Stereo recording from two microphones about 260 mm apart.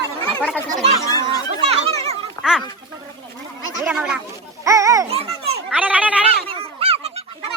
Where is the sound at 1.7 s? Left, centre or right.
Right.